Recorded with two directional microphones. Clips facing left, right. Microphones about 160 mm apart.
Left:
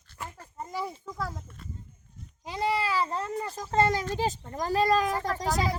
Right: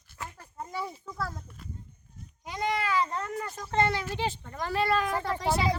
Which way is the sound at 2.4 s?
30° left (ahead or behind).